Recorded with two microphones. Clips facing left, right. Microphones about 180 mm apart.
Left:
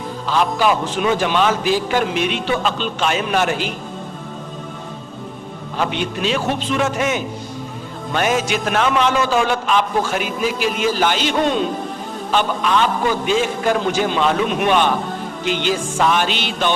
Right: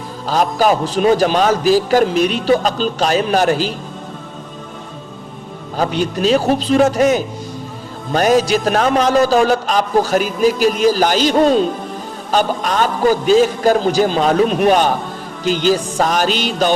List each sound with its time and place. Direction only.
0.3 s a man's voice: 40° right (ahead or behind)
5.7 s a man's voice: 40° right (ahead or behind)